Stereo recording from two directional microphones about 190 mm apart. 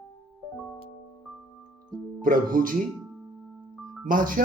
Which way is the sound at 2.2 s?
45° right (ahead or behind).